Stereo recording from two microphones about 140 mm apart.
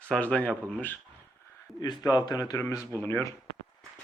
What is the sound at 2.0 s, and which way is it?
Speech, 25° left (ahead or behind).